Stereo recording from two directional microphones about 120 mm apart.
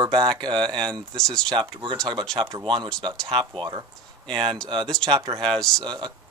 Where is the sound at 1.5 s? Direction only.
40° right (ahead or behind).